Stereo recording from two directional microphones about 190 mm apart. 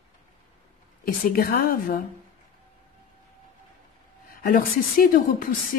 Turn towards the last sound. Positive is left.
turn(degrees=50)  # may be behind; listen again after turning